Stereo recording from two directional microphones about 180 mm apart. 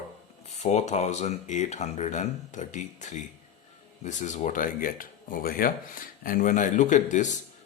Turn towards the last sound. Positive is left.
turn(degrees=45)  # may be behind; listen again after turning